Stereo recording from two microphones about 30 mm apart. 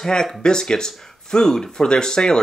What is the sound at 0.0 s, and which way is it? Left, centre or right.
Speech, centre.